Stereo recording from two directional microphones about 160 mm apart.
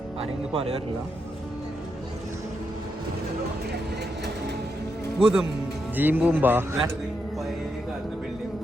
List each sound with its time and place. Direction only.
0.2 s speech: 40° right (ahead or behind)
5.2 s speech: 5° right (ahead or behind)